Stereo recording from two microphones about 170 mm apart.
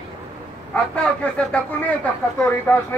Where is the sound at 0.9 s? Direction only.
5° left (ahead or behind).